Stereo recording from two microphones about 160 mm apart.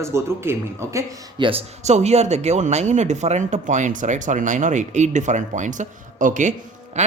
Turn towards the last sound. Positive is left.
turn(degrees=-45)  # may be behind; listen again after turning